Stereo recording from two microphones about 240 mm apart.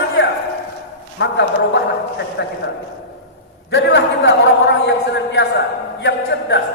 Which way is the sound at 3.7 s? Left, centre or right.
Left.